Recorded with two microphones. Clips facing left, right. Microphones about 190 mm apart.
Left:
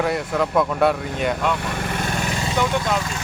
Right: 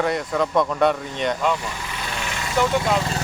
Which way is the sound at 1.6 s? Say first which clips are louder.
Left 6 dB; 60° left (ahead or behind).